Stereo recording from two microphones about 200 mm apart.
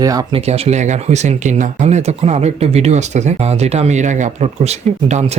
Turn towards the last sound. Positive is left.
turn(degrees=-30)  # may be behind; listen again after turning